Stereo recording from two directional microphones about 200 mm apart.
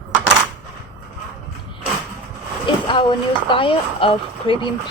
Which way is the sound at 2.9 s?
25° left (ahead or behind).